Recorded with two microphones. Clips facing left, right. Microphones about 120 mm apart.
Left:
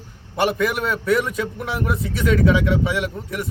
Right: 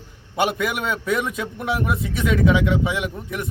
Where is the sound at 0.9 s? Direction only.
20° right (ahead or behind).